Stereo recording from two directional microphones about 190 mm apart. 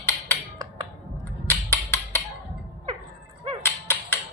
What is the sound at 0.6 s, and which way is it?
Finger snapping, 20° right (ahead or behind).